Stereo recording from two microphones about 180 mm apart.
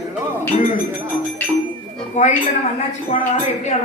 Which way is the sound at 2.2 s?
40° left (ahead or behind).